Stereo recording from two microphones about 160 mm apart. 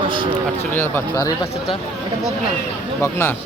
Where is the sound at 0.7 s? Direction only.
15° left (ahead or behind).